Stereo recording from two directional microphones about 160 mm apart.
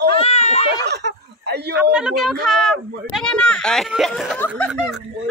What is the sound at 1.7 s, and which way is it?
A child's voice, 5° right (ahead or behind).